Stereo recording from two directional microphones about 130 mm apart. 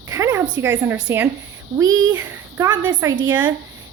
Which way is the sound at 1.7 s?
30° right (ahead or behind).